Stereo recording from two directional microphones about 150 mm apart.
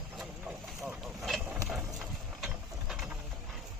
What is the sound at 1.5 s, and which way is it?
Mechanisms, 5° right (ahead or behind).